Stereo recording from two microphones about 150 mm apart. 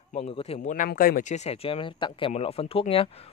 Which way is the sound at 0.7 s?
70° left (ahead or behind).